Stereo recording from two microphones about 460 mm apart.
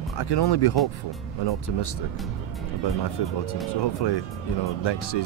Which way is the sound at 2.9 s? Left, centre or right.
Left.